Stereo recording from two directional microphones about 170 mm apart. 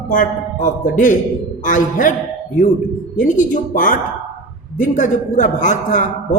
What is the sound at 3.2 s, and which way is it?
A man's voice, 50° left (ahead or behind).